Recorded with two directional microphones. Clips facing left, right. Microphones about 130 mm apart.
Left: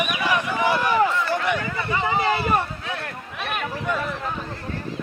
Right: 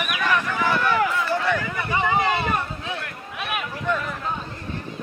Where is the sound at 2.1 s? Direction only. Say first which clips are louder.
Even; 20° right (ahead or behind).